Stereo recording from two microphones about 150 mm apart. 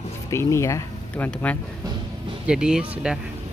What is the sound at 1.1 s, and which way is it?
Speech, 10° left (ahead or behind).